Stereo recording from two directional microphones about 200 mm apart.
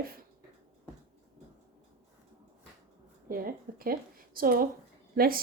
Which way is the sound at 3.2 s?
45° right (ahead or behind).